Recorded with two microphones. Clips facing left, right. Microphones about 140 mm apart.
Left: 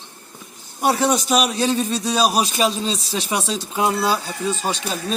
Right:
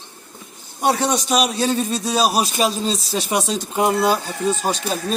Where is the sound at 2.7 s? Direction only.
40° right (ahead or behind).